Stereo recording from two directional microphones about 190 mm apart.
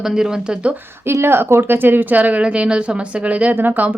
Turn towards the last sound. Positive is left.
turn(degrees=-10)  # may be behind; listen again after turning